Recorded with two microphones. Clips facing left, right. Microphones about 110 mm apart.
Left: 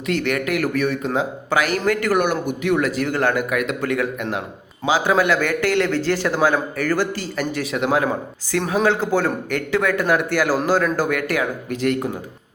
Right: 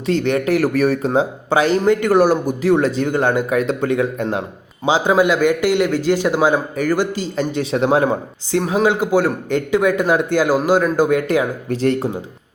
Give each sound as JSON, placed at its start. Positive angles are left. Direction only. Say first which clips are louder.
{"t": 0.0, "sound": "a man's voice", "louder": "right 4 dB", "side_deg": -25}
{"t": 8.5, "sound": "a man's voice", "louder": "right 3 dB", "side_deg": -20}